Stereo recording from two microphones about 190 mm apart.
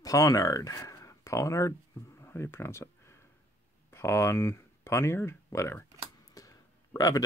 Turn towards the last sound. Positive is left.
turn(degrees=15)  # may be behind; listen again after turning